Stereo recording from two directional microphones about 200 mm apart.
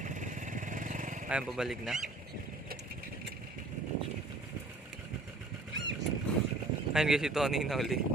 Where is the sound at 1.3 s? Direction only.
Centre (ahead or behind).